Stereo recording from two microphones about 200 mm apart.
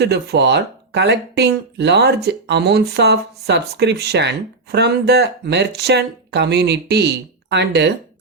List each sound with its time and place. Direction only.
0.0 s speech: 55° right (ahead or behind)